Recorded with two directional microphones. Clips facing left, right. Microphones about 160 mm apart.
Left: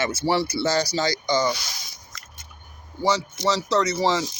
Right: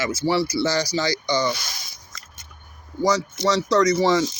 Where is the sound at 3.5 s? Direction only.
30° left (ahead or behind).